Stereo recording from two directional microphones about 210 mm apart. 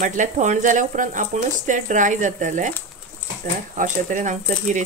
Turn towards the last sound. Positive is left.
turn(degrees=-35)  # may be behind; listen again after turning